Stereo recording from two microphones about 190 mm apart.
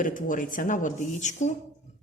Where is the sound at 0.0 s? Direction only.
45° left (ahead or behind).